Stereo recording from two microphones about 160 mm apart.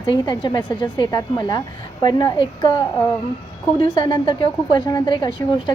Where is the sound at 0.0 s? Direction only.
30° left (ahead or behind).